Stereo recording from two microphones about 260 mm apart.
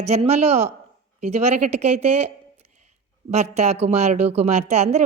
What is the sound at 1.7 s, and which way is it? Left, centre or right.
Speech, right.